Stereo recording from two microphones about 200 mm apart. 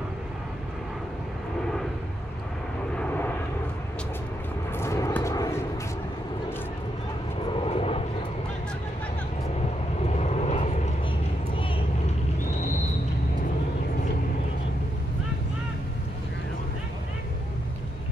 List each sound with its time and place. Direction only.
3.0 s vehicle: 10° left (ahead or behind)
4.7 s vehicle: 15° left (ahead or behind)
7.4 s vehicle: 25° left (ahead or behind)
10.0 s vehicle: 35° left (ahead or behind)